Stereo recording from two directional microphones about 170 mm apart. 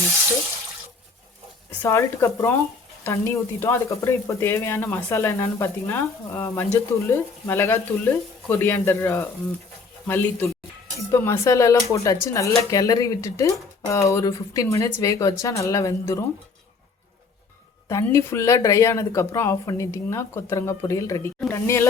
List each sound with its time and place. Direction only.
1.8 s speech: 15° left (ahead or behind)
11.1 s speech: 15° left (ahead or behind)
17.8 s speech: 15° left (ahead or behind)